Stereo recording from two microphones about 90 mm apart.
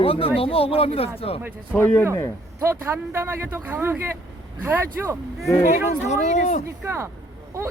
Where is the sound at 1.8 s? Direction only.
25° left (ahead or behind).